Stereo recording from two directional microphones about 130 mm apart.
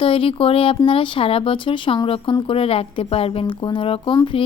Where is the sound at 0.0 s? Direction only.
45° left (ahead or behind).